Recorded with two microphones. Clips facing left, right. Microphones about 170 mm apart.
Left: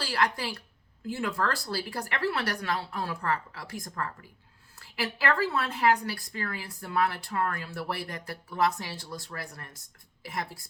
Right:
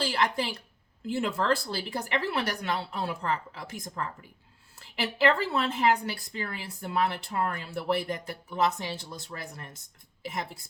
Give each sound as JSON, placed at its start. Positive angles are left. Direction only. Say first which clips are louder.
{"t": 0.0, "sound": "a woman's voice", "louder": "right 1 dB", "side_deg": -25}